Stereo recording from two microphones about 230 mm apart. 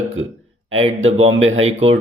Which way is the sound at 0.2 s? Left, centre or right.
Right.